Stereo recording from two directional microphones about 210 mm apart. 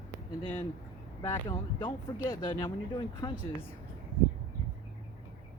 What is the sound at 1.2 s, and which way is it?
Speech, 25° left (ahead or behind).